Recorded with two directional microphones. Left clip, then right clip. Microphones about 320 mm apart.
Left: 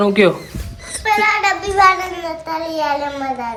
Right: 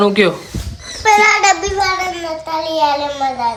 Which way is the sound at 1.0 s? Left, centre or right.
Right.